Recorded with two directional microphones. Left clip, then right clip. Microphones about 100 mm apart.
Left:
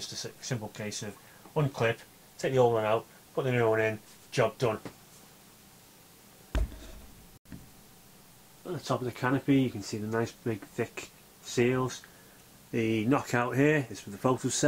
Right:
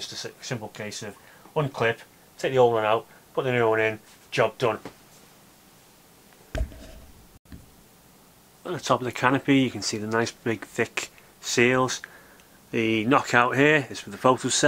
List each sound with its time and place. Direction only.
0.0 s speech: centre (ahead or behind)
8.6 s speech: 15° right (ahead or behind)
12.7 s speech: centre (ahead or behind)